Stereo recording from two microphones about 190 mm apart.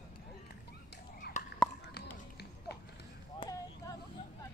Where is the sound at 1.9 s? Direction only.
60° left (ahead or behind).